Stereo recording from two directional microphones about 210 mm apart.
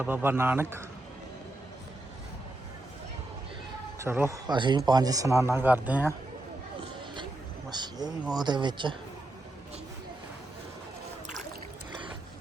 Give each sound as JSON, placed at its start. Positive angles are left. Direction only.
{"t": 0.0, "sound": "a man's voice", "side_deg": -10}
{"t": 3.9, "sound": "a man's voice", "side_deg": -10}
{"t": 7.7, "sound": "speech", "side_deg": -20}